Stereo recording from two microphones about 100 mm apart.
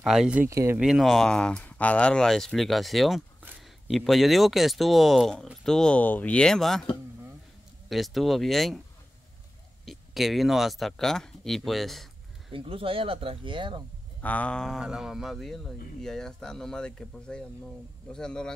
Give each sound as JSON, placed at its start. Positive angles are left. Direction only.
{"t": 0.0, "sound": "speech", "side_deg": -5}
{"t": 0.5, "sound": "speech", "side_deg": -30}
{"t": 0.7, "sound": "speech", "side_deg": -5}
{"t": 7.9, "sound": "speech", "side_deg": 0}
{"t": 9.8, "sound": "speech", "side_deg": 0}
{"t": 12.5, "sound": "speech", "side_deg": -65}
{"t": 14.2, "sound": "a sound", "side_deg": 15}
{"t": 14.8, "sound": "speech", "side_deg": -5}
{"t": 18.1, "sound": "a sound", "side_deg": 10}